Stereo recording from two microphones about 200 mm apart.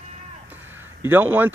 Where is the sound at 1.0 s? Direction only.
10° right (ahead or behind).